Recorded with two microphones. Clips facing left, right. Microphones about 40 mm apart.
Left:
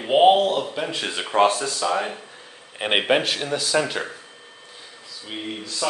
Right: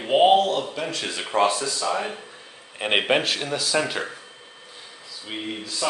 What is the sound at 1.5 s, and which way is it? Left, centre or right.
Speech, left.